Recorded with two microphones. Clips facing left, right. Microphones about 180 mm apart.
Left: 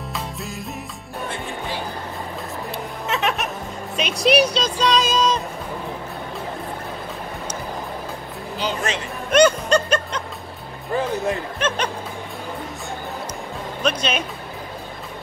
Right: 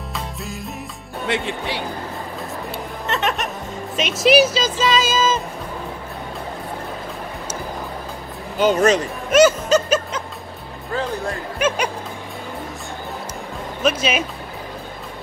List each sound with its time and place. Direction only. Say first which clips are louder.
0.1 s music: right 1 dB; centre (ahead or behind)
1.2 s speech: right 6 dB; 75° right (ahead or behind)
2.7 s music: even; centre (ahead or behind)
3.9 s speech: right 3 dB; centre (ahead or behind)
8.5 s speech: right 10 dB; 45° right (ahead or behind)
9.3 s music: right 2 dB; 5° right (ahead or behind)
11.6 s speech: right 4 dB; 10° right (ahead or behind)
13.8 s speech: right 3 dB; 5° right (ahead or behind)